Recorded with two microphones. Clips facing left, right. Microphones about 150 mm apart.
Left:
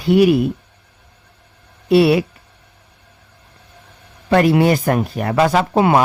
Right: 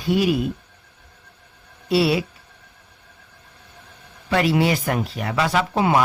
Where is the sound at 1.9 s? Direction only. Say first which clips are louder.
Left 7 dB; 55° left (ahead or behind).